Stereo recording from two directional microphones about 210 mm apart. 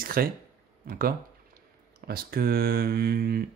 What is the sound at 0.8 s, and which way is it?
Speech, 45° right (ahead or behind).